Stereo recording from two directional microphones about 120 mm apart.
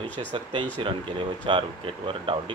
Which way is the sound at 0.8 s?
45° right (ahead or behind).